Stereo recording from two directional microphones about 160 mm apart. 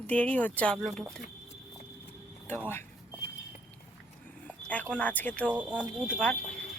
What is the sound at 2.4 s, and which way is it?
Speech, 10° left (ahead or behind).